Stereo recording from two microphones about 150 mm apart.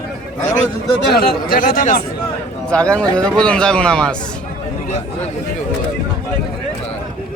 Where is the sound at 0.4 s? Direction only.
55° left (ahead or behind).